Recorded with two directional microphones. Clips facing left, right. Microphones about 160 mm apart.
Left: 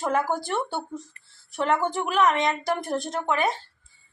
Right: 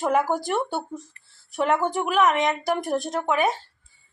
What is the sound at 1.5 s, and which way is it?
A woman's voice, centre (ahead or behind).